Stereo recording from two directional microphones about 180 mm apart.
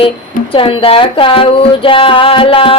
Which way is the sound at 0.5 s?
30° left (ahead or behind).